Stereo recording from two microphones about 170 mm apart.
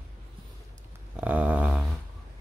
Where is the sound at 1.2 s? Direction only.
10° right (ahead or behind).